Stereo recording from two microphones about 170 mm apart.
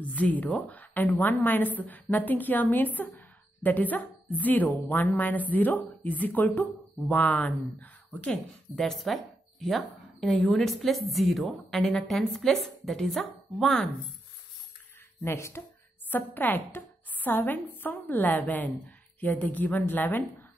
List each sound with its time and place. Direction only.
0.0 s a woman's voice: 10° left (ahead or behind)
15.2 s a woman's voice: 15° left (ahead or behind)